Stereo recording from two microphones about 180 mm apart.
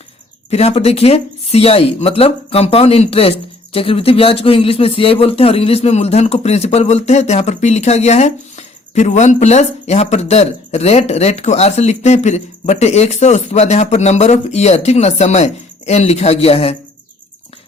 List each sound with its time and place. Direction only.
0.5 s speech: 35° left (ahead or behind)